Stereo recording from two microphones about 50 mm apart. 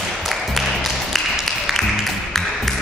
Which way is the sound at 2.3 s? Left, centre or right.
Centre.